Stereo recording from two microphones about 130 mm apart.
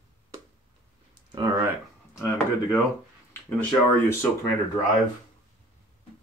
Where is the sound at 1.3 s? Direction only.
25° right (ahead or behind).